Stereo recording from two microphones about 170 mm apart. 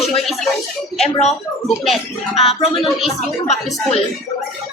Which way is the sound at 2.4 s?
35° left (ahead or behind).